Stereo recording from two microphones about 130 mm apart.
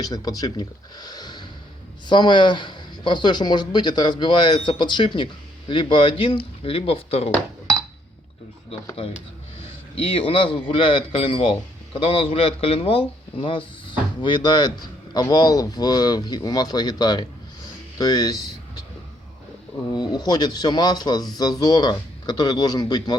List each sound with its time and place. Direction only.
0.0 s speech: 30° left (ahead or behind); by 7.3 s 50° left (ahead or behind)
9.9 s a man's voice: 45° left (ahead or behind); by 18.3 s 30° left (ahead or behind)
19.9 s speech: 30° left (ahead or behind)